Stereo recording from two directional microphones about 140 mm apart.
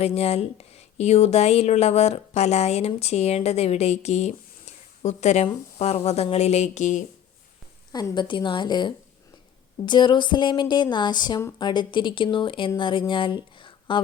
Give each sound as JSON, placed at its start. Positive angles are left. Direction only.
{"t": 0.0, "sound": "speech", "side_deg": 50}
{"t": 7.9, "sound": "speech", "side_deg": 30}